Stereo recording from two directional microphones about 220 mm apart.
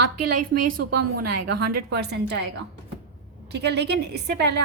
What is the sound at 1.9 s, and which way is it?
Speech, 50° right (ahead or behind).